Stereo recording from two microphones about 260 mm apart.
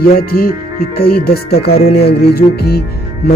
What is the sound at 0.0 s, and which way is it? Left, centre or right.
Speech, left.